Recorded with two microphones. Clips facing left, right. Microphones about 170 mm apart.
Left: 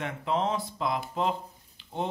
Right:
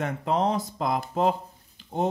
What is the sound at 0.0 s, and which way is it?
Speech, 40° right (ahead or behind).